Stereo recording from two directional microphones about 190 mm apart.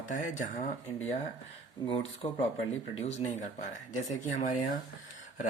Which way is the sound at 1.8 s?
30° left (ahead or behind).